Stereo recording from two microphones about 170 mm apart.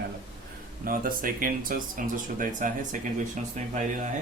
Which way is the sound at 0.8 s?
55° right (ahead or behind).